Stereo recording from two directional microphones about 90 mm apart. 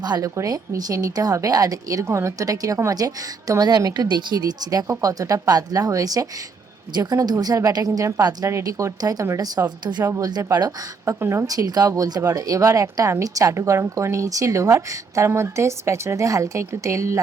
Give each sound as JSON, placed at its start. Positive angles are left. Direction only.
{"t": 0.0, "sound": "a woman's voice", "side_deg": -50}
{"t": 0.3, "sound": "a woman's voice", "side_deg": -40}
{"t": 8.4, "sound": "speech", "side_deg": -35}
{"t": 9.6, "sound": "speech", "side_deg": -55}
{"t": 10.2, "sound": "a woman's voice", "side_deg": -45}
{"t": 11.0, "sound": "speech", "side_deg": -30}